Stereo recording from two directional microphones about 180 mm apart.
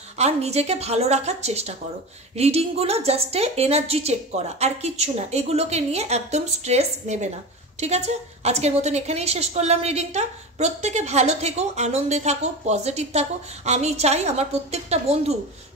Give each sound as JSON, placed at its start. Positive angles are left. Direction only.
{"t": 0.2, "sound": "a woman's voice", "side_deg": -35}